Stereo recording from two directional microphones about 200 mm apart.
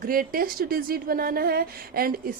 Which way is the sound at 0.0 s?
45° right (ahead or behind).